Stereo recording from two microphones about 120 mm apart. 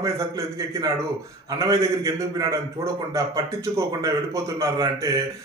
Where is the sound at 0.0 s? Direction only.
25° right (ahead or behind).